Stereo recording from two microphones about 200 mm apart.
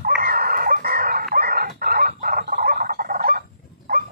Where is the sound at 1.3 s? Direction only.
45° right (ahead or behind).